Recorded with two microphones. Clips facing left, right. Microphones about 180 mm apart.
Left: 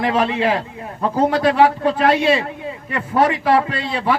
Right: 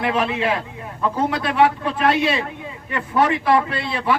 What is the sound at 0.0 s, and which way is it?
A man's voice, 35° left (ahead or behind).